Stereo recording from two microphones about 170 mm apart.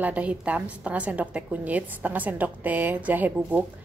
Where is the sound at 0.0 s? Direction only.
10° right (ahead or behind).